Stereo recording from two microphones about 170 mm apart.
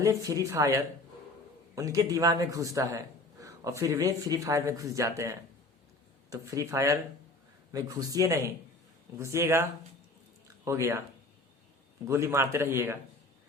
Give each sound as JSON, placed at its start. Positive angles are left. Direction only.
{"t": 0.0, "sound": "a man's voice", "side_deg": -20}
{"t": 10.7, "sound": "a man's voice", "side_deg": -15}
{"t": 12.0, "sound": "a man's voice", "side_deg": -15}